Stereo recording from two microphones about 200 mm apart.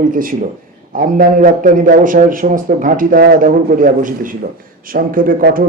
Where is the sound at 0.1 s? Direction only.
45° right (ahead or behind).